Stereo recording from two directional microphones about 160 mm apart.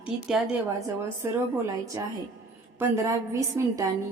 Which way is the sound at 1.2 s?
15° right (ahead or behind).